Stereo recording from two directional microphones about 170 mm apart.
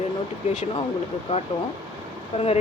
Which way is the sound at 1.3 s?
35° left (ahead or behind).